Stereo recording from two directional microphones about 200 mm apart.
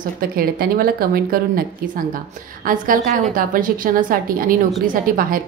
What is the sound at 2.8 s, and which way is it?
A woman's voice, 45° right (ahead or behind).